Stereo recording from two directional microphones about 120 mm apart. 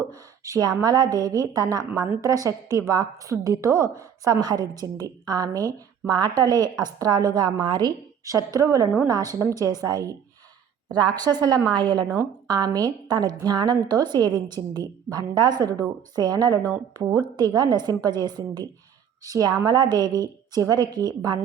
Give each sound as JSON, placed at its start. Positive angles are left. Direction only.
{"t": 0.0, "sound": "a woman's voice", "side_deg": -30}
{"t": 12.0, "sound": "a woman's voice", "side_deg": -20}
{"t": 12.5, "sound": "a woman's voice", "side_deg": -30}